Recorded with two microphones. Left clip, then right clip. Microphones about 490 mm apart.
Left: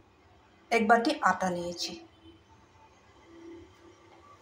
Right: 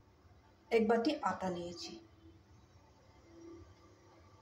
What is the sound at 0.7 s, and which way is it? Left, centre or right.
A woman's voice, right.